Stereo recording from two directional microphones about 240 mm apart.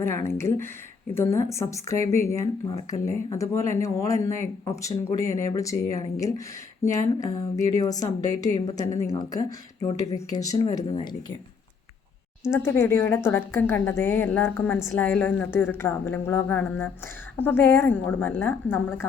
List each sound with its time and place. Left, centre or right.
0.0 s speech: centre
12.5 s speech: centre